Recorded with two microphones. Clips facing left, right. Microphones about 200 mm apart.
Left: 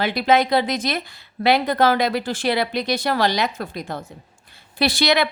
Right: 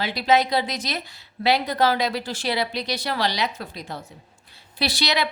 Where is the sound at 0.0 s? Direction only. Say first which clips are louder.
Left 3 dB; 55° left (ahead or behind).